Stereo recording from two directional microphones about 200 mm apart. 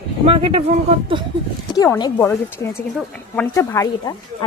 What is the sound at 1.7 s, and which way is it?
A woman's voice, 15° left (ahead or behind).